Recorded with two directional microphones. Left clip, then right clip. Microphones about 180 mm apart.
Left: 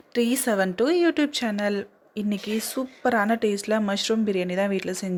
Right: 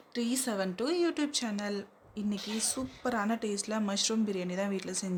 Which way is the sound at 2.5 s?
60° left (ahead or behind).